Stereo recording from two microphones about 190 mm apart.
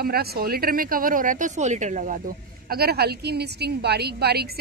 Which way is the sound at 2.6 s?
55° right (ahead or behind).